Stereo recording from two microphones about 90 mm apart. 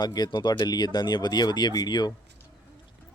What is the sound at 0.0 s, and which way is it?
Speech, 50° left (ahead or behind).